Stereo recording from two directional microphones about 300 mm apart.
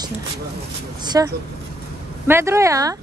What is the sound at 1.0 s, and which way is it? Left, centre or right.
A woman's voice, centre.